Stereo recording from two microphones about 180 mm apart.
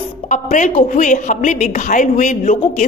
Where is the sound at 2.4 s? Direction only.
35° left (ahead or behind).